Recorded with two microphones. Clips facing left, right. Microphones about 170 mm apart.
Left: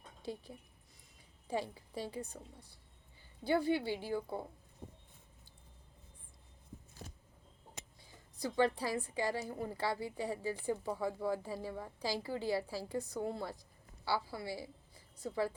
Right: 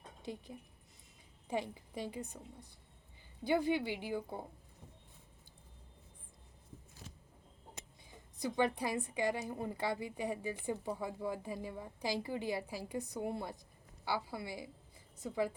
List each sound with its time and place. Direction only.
0.2 s a woman's voice: 20° right (ahead or behind)
4.8 s a sound: 30° left (ahead or behind)
8.1 s a woman's voice: 20° right (ahead or behind)